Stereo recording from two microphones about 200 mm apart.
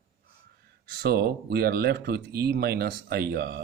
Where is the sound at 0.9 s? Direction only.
50° right (ahead or behind).